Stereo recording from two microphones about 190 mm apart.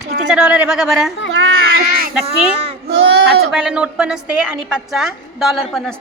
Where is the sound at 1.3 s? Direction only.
85° right.